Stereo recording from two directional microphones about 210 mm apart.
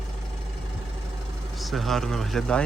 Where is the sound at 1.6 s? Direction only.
Centre (ahead or behind).